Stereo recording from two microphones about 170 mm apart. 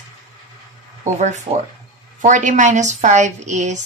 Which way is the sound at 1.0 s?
45° right (ahead or behind).